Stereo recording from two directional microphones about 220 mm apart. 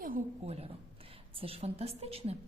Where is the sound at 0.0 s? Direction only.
35° right (ahead or behind).